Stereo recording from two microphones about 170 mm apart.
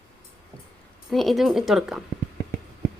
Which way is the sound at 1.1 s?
Centre (ahead or behind).